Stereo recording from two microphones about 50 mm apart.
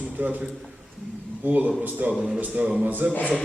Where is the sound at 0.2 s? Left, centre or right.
Right.